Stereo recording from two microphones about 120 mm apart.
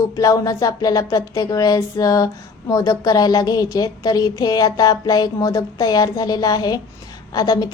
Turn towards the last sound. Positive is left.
turn(degrees=30)  # may be behind; listen again after turning